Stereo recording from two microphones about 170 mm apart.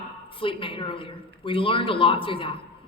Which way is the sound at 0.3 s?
30° left (ahead or behind).